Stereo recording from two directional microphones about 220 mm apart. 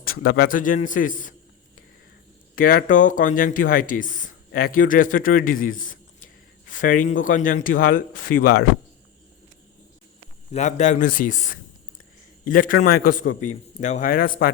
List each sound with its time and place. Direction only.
0.0 s speech: 40° left (ahead or behind)
2.6 s speech: 40° left (ahead or behind)
5.5 s a sound: 40° left (ahead or behind)
7.2 s speech: 35° left (ahead or behind)
10.5 s speech: 35° left (ahead or behind)